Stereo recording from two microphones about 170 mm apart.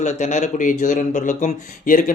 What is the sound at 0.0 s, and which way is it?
Speech, 45° left (ahead or behind).